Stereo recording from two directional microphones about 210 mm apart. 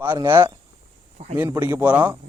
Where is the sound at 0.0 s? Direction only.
10° right (ahead or behind).